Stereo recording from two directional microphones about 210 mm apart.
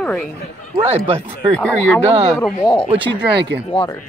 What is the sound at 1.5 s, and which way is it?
Speech, 5° left (ahead or behind).